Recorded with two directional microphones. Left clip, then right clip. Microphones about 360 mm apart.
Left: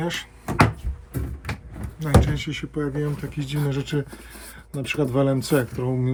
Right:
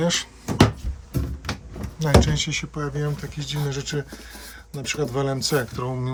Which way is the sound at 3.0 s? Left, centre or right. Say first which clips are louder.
Left 1 dB; centre.